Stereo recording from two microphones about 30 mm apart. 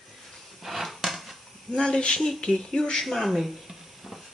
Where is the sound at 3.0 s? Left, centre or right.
Centre.